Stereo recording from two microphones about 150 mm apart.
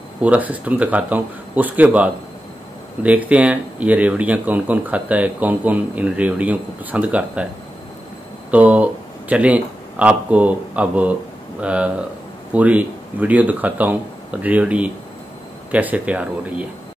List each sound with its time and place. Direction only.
0.2 s speech: 10° right (ahead or behind)
8.5 s speech: 10° right (ahead or behind)